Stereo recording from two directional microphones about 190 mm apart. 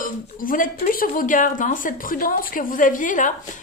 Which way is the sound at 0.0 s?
45° left (ahead or behind).